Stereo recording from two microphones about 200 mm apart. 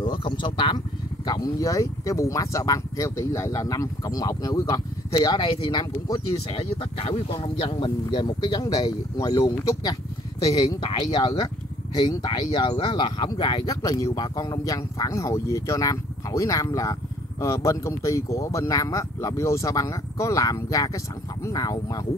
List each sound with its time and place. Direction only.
0.0 s speech: 25° left (ahead or behind)